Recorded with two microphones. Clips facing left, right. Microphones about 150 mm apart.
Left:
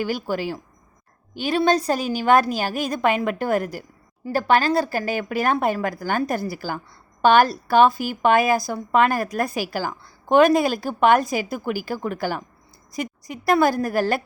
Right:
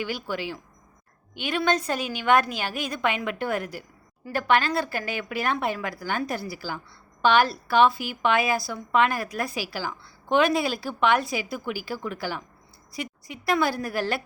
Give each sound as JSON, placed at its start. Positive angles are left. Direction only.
{"t": 0.0, "sound": "a woman's voice", "side_deg": 40}